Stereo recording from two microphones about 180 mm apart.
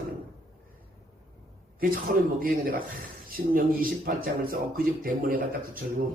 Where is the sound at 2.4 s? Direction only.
55° right (ahead or behind).